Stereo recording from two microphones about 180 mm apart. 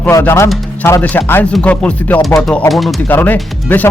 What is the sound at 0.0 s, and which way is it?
Speech, 15° left (ahead or behind).